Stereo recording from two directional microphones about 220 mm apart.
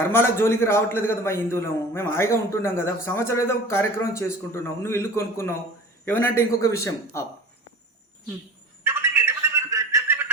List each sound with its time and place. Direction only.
0.0 s a man's voice: 10° left (ahead or behind)
8.8 s telephone: 10° right (ahead or behind)